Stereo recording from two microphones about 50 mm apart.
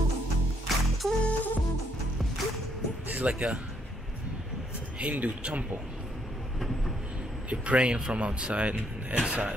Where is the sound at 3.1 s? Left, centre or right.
Right.